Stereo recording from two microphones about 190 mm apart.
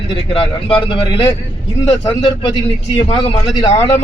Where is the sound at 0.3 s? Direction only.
25° left (ahead or behind).